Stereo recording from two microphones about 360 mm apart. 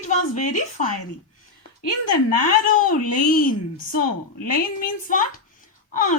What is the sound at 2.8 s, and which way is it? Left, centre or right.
Speech, left.